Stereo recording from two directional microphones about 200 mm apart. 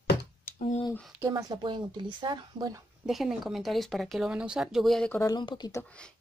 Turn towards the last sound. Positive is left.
turn(degrees=5)  # may be behind; listen again after turning